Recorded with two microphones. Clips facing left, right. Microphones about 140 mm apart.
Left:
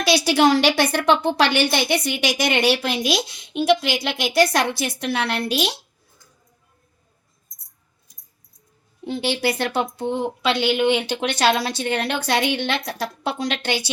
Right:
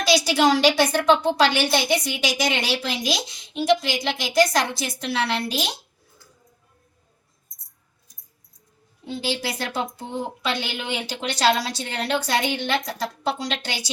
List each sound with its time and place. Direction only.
0.0 s speech: 60° left (ahead or behind)
9.0 s speech: 60° left (ahead or behind)